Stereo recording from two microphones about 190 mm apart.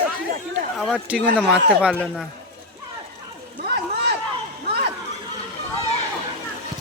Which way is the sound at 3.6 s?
65° right (ahead or behind).